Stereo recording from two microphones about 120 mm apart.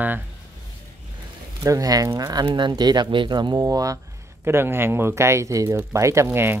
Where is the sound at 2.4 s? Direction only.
40° right (ahead or behind).